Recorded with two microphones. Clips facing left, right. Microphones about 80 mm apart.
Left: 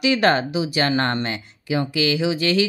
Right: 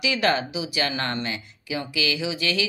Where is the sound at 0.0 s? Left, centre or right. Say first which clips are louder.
Left 5 dB; left.